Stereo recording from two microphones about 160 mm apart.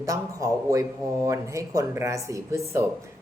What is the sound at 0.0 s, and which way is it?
Speech, 20° right (ahead or behind).